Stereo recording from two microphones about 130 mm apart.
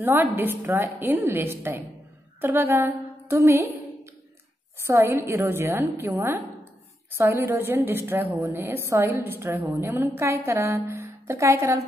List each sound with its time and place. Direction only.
0.0 s a woman's voice: 15° right (ahead or behind)